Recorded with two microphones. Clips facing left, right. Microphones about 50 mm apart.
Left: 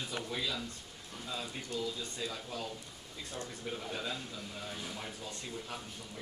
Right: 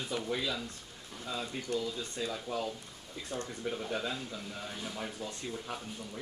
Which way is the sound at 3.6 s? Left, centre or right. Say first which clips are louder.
Right 4 dB; centre.